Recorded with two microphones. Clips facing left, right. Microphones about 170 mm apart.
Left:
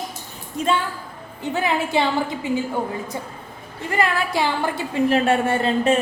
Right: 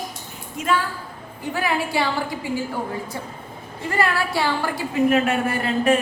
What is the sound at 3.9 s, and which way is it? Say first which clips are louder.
A woman's voice: left 1 dB; 20° left (ahead or behind).